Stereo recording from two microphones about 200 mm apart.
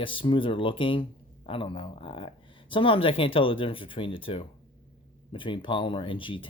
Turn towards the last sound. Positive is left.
turn(degrees=25)  # may be behind; listen again after turning